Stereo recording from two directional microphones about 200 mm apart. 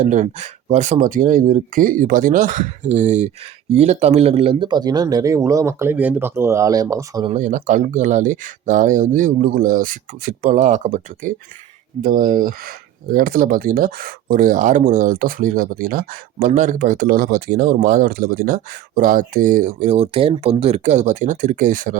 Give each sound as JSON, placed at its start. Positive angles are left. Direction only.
{"t": 0.0, "sound": "speech", "side_deg": -40}
{"t": 7.3, "sound": "speech", "side_deg": -40}